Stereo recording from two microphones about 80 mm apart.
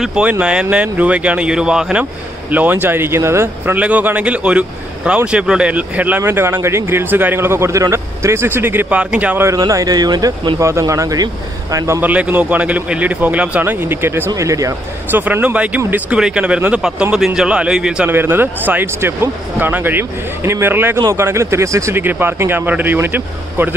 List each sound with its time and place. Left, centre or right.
0.2 s speech: centre
2.5 s a man's voice: right
3.7 s speech: centre
6.2 s a man's voice: right
8.9 s speech: centre
9.6 s speech: right
10.6 s speech: right
12.0 s a man's voice: centre
14.3 s a man's voice: right
15.0 s a man's voice: right; by 18.1 s centre
18.1 s a man's voice: right
21.9 s a man's voice: right